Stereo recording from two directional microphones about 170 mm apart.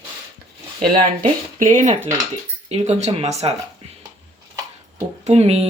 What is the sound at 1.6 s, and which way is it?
Speech, 50° right (ahead or behind).